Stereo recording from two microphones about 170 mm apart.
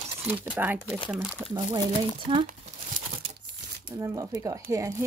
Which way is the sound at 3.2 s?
35° right (ahead or behind).